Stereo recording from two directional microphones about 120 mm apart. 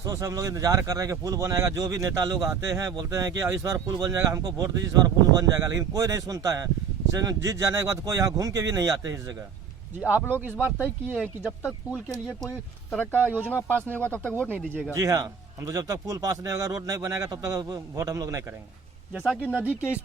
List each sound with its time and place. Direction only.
0.0 s speech: 25° right (ahead or behind)
10.1 s speech: 15° right (ahead or behind)
12.9 s speech: 10° left (ahead or behind)
14.5 s speech: 15° right (ahead or behind)
14.9 s speech: 30° right (ahead or behind)
19.4 s speech: 10° left (ahead or behind)
19.6 s speech: 10° right (ahead or behind)